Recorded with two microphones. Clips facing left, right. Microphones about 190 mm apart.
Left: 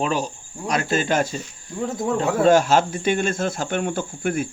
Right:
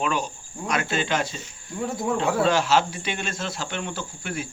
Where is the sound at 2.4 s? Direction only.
45° left (ahead or behind).